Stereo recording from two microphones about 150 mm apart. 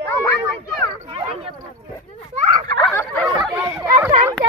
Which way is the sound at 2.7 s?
10° left (ahead or behind).